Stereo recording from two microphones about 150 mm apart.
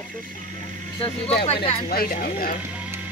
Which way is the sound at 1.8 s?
75° left (ahead or behind).